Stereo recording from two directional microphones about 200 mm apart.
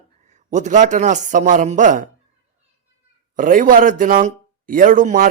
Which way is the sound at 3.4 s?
45° right (ahead or behind).